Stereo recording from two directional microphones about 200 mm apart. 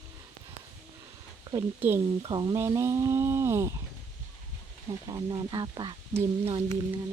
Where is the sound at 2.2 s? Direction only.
20° right (ahead or behind).